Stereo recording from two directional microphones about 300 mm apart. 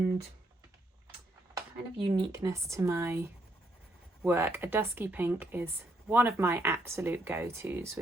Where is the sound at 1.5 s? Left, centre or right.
Centre.